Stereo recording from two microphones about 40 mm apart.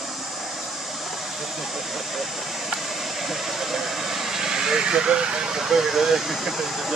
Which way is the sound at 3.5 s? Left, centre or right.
Centre.